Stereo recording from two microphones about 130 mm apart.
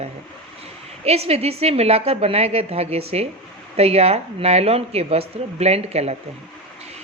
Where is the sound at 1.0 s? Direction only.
50° right (ahead or behind).